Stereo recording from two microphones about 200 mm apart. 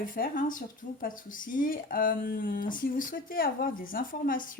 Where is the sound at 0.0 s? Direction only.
45° left (ahead or behind).